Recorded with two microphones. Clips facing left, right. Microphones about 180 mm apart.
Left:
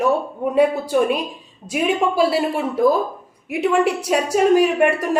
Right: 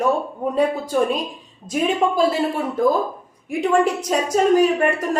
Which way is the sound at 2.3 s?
10° left (ahead or behind).